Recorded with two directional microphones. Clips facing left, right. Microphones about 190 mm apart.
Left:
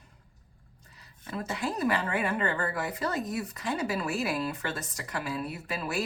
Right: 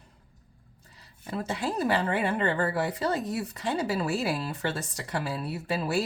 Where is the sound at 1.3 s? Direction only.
30° right (ahead or behind).